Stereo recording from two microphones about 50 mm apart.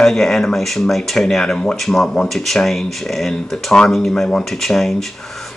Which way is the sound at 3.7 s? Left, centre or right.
Centre.